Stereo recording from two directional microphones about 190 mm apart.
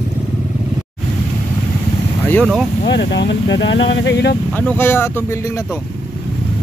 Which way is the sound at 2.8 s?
65° left (ahead or behind).